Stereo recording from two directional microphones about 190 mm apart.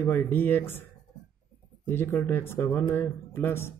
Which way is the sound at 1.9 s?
10° left (ahead or behind).